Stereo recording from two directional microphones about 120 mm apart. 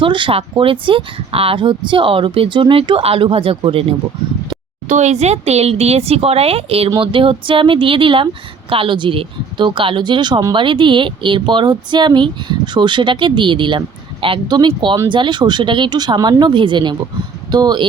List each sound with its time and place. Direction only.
0.0 s speech: 45° right (ahead or behind)
4.9 s speech: 80° right; by 17.8 s 35° right (ahead or behind)